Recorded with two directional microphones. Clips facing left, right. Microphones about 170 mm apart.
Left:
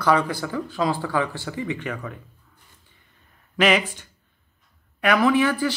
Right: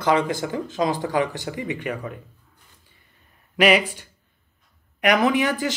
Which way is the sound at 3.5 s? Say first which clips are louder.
Right 2 dB; 10° right (ahead or behind).